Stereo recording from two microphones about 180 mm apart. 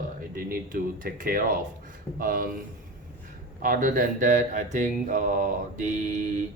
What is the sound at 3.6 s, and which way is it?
Mantra, 50° right (ahead or behind).